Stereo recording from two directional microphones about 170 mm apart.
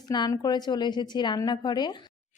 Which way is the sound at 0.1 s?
25° left (ahead or behind).